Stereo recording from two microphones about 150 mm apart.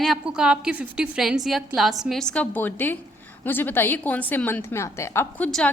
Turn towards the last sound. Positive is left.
turn(degrees=5)  # may be behind; listen again after turning